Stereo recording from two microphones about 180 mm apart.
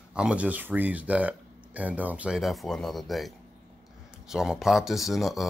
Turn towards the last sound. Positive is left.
turn(degrees=0)  # may be behind; listen again after turning